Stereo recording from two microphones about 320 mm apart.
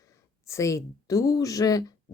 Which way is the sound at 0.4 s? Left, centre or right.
Centre.